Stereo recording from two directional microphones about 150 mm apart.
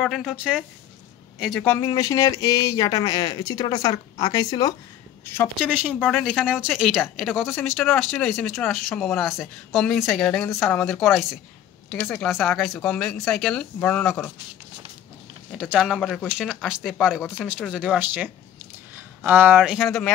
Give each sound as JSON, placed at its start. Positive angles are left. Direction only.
{"t": 0.0, "sound": "speech", "side_deg": 0}
{"t": 1.6, "sound": "a woman's voice", "side_deg": 15}
{"t": 5.6, "sound": "speech", "side_deg": -10}
{"t": 5.9, "sound": "speech", "side_deg": 10}
{"t": 6.3, "sound": "speech", "side_deg": -5}
{"t": 15.5, "sound": "speech", "side_deg": -5}